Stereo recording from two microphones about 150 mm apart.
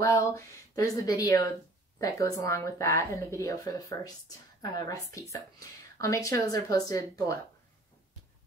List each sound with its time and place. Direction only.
0.0 s speech: 20° left (ahead or behind)